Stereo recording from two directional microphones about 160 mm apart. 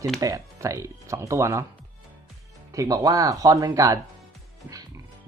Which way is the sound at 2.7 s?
20° right (ahead or behind).